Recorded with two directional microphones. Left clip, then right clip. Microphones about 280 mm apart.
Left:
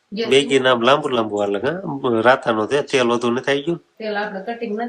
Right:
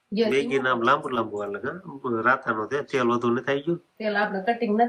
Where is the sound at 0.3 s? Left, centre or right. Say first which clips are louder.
Left 11 dB; centre.